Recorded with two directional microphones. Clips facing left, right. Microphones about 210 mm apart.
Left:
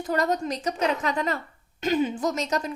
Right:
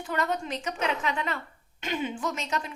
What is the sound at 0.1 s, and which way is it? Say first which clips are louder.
A woman's voice: left 5 dB; 40° left (ahead or behind).